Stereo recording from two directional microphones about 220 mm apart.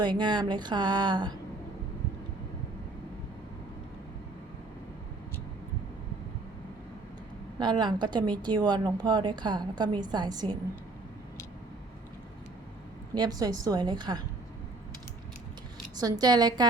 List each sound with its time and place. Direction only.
0.0 s a woman's voice: 20° right (ahead or behind)
7.6 s a woman's voice: 20° right (ahead or behind)
13.1 s a woman's voice: 15° right (ahead or behind)
16.0 s a woman's voice: 15° right (ahead or behind)